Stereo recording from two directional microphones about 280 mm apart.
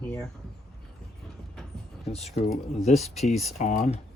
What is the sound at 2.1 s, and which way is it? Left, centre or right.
Speech, left.